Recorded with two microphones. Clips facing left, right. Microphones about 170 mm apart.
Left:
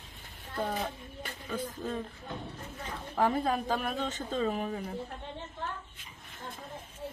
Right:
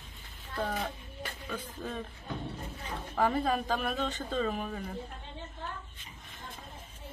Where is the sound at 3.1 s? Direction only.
10° left (ahead or behind).